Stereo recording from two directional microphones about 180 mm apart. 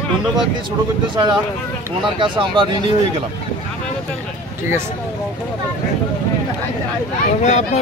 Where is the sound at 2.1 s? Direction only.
25° right (ahead or behind).